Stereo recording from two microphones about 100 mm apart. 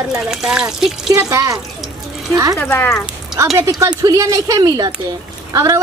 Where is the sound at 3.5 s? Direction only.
30° right (ahead or behind).